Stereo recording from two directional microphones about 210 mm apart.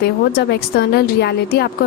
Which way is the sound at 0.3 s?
50° left (ahead or behind).